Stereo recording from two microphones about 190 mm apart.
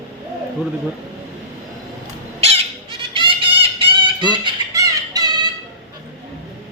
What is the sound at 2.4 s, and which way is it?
Bird, 30° right (ahead or behind).